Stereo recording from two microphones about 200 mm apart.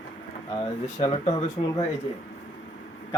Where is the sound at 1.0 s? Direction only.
30° left (ahead or behind).